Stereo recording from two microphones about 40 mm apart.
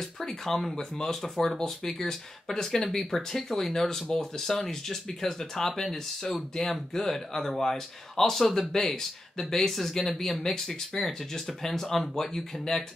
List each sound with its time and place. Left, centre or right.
0.2 s speech: centre
5.9 s speech: centre
6.5 s speech: centre